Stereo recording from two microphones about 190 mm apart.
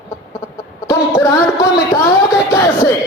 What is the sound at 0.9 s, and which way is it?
Music, 15° left (ahead or behind).